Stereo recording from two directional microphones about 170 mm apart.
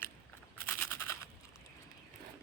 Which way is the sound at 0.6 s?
15° left (ahead or behind).